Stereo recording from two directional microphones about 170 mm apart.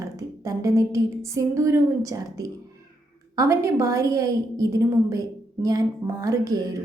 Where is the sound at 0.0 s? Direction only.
20° right (ahead or behind).